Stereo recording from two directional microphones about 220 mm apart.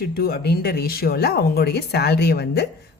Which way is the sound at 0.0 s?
45° left (ahead or behind).